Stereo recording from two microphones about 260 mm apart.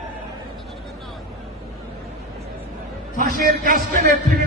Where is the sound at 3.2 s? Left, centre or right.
Right.